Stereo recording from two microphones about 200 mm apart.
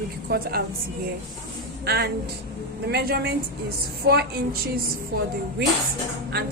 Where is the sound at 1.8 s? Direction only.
55° right (ahead or behind).